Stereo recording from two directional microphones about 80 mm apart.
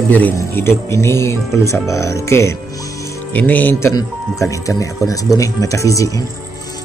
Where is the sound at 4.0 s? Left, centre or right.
Left.